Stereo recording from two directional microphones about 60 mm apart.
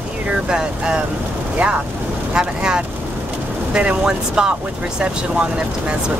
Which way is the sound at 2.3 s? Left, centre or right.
Centre.